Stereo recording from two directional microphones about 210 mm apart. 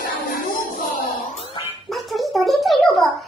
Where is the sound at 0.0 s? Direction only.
40° left (ahead or behind).